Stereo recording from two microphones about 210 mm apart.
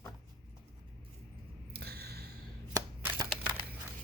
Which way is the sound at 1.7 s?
50° right (ahead or behind).